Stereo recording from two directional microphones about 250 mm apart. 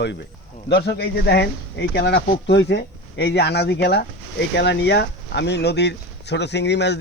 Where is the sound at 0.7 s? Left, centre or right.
Left.